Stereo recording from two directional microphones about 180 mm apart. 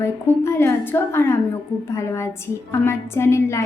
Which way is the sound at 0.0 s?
15° left (ahead or behind).